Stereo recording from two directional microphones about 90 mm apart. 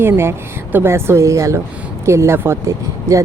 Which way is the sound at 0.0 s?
25° right (ahead or behind).